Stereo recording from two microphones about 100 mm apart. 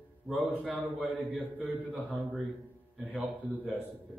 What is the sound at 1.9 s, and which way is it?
Speech, 15° left (ahead or behind).